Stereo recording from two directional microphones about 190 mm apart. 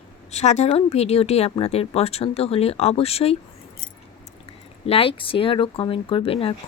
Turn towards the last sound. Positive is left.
turn(degrees=30)  # may be behind; listen again after turning